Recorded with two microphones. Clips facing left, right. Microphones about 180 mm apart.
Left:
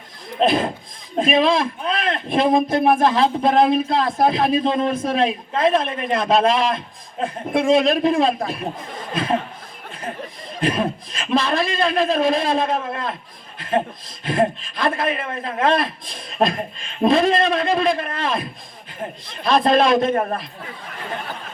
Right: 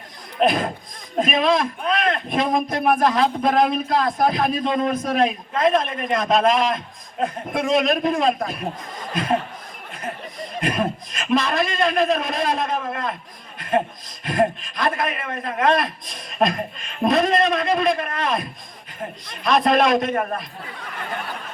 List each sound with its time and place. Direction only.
0.3 s a man's voice: 30° left (ahead or behind)
10.6 s a man's voice: 30° left (ahead or behind)
13.6 s a sound: 30° left (ahead or behind)
14.3 s a man's voice: 30° left (ahead or behind)